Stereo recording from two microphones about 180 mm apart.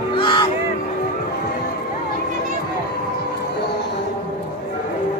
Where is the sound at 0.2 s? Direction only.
25° left (ahead or behind).